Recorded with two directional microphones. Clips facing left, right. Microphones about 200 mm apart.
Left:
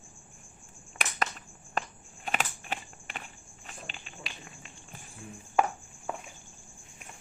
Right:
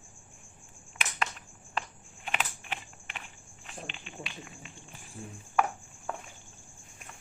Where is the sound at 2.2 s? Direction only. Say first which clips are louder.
Left 2 dB; 40° left (ahead or behind).